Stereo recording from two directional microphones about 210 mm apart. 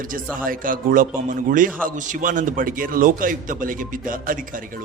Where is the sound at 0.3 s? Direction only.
40° right (ahead or behind).